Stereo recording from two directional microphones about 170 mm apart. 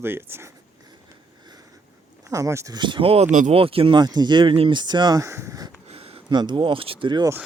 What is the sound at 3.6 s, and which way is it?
Speech, 35° right (ahead or behind).